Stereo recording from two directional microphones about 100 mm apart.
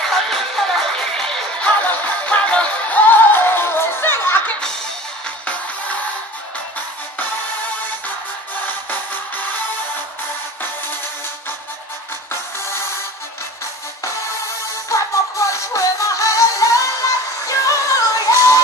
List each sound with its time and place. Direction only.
0.1 s music: 5° left (ahead or behind); by 4.6 s 20° left (ahead or behind)
14.9 s music: 30° left (ahead or behind)